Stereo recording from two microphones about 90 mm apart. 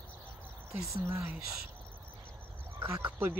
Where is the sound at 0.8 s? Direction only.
35° right (ahead or behind).